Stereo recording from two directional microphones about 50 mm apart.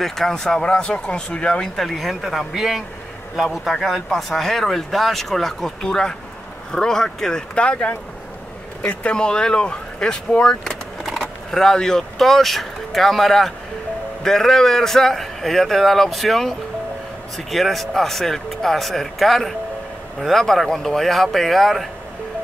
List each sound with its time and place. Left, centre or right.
0.0 s speech: centre
1.8 s a man's voice: centre
3.8 s a man's voice: centre